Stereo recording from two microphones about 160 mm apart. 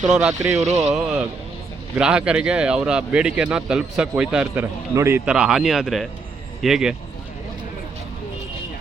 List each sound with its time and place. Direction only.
0.1 s speech: 5° right (ahead or behind)